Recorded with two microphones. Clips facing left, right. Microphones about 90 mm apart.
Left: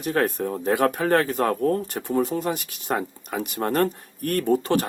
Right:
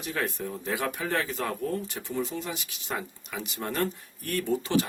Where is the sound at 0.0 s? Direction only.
50° left (ahead or behind).